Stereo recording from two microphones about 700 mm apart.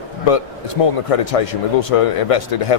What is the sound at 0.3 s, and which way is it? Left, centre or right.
Speech, left.